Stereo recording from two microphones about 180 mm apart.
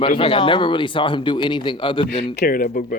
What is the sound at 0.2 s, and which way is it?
Speech, 30° left (ahead or behind).